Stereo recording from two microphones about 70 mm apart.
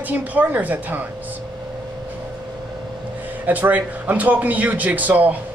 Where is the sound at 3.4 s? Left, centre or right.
Right.